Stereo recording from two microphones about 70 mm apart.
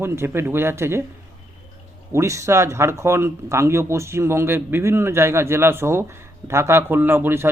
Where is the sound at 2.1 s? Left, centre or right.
Right.